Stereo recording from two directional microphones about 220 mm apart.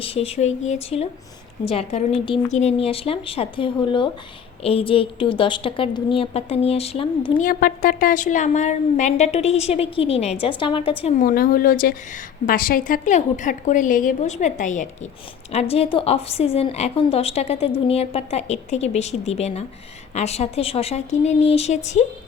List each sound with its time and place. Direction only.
0.0 s a woman's voice: 25° left (ahead or behind)
11.2 s a woman's voice: 35° left (ahead or behind)